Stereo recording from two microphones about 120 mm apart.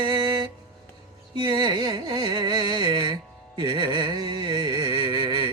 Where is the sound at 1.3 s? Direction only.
40° right (ahead or behind).